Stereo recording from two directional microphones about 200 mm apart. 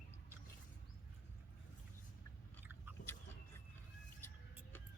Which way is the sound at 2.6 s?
10° right (ahead or behind).